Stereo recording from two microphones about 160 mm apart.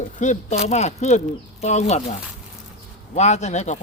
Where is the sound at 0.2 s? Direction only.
50° left (ahead or behind).